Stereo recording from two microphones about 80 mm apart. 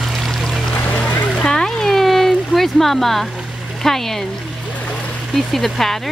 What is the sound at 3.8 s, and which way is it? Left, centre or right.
Speech, centre.